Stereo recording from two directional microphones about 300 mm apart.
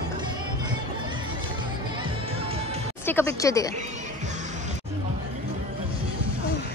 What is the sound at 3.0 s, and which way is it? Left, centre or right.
Speech, centre.